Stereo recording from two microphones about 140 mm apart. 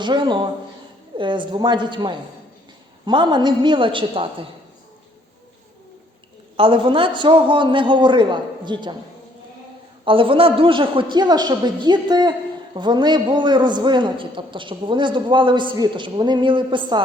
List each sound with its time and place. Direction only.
0.0 s a man's voice: 35° right (ahead or behind)
6.6 s a man's voice: 35° right (ahead or behind)
10.0 s a man's voice: 40° right (ahead or behind)